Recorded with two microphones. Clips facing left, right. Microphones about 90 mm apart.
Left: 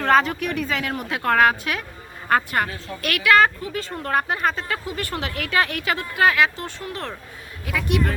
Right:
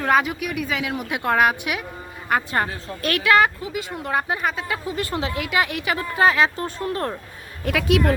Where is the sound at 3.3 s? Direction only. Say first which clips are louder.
Left 1 dB; 15° right (ahead or behind).